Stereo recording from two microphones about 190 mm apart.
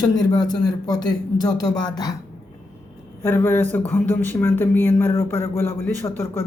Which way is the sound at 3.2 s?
10° left (ahead or behind).